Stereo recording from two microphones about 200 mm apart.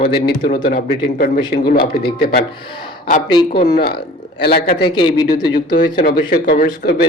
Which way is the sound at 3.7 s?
50° left (ahead or behind).